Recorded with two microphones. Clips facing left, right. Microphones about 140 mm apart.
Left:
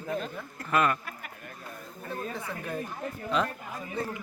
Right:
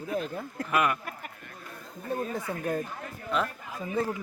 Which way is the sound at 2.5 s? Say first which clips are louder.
Right 3 dB; 45° right (ahead or behind).